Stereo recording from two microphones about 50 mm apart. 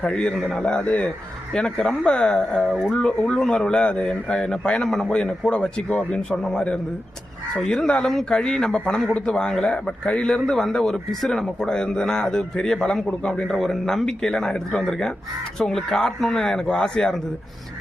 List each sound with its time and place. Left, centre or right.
0.1 s a man's voice: left
4.9 s a man's voice: centre
5.1 s a man's voice: centre
6.3 s a man's voice: centre